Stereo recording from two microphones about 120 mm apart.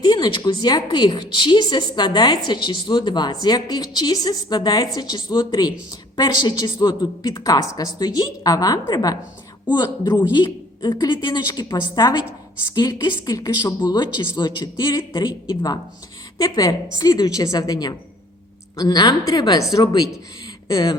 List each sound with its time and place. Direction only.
0.0 s speech: 40° left (ahead or behind)